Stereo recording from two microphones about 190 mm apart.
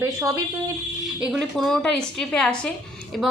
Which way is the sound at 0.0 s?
15° right (ahead or behind).